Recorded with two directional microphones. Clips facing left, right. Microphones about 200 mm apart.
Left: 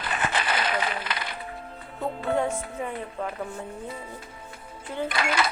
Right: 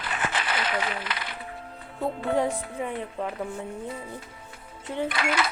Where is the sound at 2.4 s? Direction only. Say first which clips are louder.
Right 1 dB; 15° right (ahead or behind).